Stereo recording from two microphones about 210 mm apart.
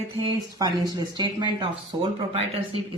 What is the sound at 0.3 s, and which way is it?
A woman's voice, 20° right (ahead or behind).